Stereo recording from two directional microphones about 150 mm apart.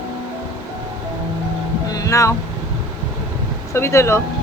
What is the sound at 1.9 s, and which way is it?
Boat, 25° left (ahead or behind).